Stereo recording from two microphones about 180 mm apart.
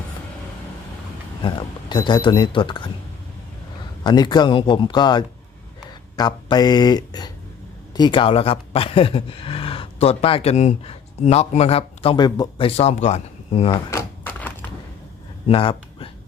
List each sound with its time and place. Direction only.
1.4 s speech: 25° left (ahead or behind)
4.0 s speech: 25° left (ahead or behind)
13.7 s a sound: 15° left (ahead or behind)
15.4 s speech: 30° left (ahead or behind)